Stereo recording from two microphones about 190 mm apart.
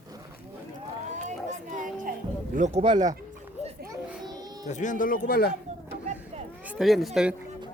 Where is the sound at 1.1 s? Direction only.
40° right (ahead or behind).